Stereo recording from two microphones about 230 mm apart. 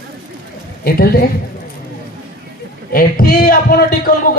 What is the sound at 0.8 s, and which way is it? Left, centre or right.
Speech, left.